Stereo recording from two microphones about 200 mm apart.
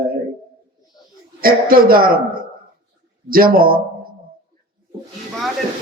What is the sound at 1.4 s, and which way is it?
A man's voice, 45° right (ahead or behind).